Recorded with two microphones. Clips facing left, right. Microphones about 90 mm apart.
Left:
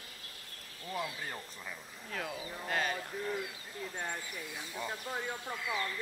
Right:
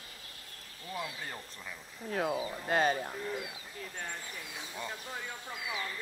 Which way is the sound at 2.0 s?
30° right (ahead or behind).